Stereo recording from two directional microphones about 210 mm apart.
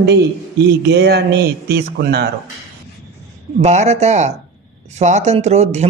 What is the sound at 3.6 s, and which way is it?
Speech, 35° right (ahead or behind).